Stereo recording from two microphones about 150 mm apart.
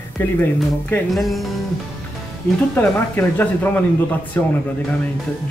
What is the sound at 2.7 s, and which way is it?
Speech, 15° left (ahead or behind).